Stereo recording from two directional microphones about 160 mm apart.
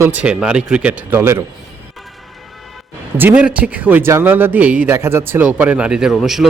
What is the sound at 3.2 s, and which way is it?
Speech, 10° right (ahead or behind).